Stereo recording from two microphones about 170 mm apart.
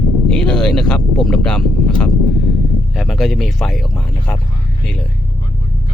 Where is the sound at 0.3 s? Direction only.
5° left (ahead or behind).